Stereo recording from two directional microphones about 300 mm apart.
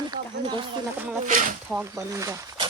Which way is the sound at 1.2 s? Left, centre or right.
Right.